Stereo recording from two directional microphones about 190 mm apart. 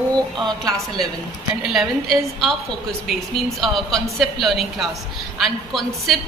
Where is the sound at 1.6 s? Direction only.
Centre (ahead or behind).